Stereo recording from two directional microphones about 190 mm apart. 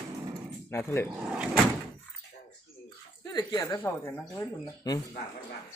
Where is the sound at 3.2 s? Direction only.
20° left (ahead or behind).